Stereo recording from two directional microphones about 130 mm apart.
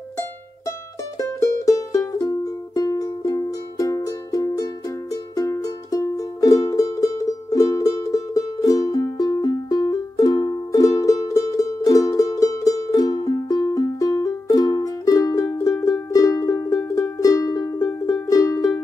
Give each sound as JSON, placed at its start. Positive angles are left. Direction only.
{"t": 1.4, "sound": "music", "side_deg": 25}